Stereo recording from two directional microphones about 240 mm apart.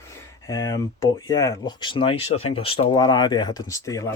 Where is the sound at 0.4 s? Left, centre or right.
Centre.